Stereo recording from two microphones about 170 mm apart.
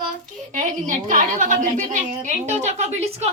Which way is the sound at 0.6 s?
50° right (ahead or behind).